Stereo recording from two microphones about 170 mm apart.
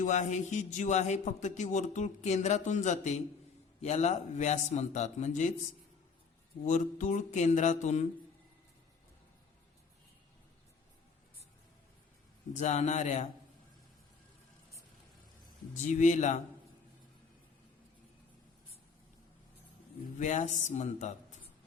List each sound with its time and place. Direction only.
0.0 s speech: 45° left (ahead or behind)
6.7 s speech: 45° left (ahead or behind)
12.5 s speech: 45° left (ahead or behind)
15.9 s speech: 45° left (ahead or behind)
20.1 s speech: 45° left (ahead or behind)